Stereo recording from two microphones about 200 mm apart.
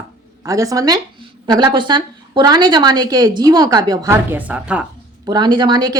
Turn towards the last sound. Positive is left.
turn(degrees=-20)  # may be behind; listen again after turning